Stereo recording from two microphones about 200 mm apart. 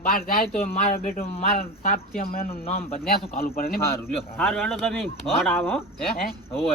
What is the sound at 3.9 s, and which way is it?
Speech, 5° left (ahead or behind).